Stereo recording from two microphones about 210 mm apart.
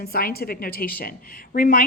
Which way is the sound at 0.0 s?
45° left (ahead or behind).